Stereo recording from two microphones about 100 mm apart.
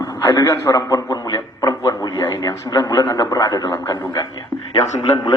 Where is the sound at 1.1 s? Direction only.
40° left (ahead or behind).